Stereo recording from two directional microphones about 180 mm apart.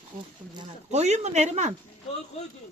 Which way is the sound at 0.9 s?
40° right (ahead or behind).